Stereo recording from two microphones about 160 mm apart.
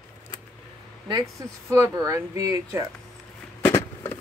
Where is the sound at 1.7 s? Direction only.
20° right (ahead or behind).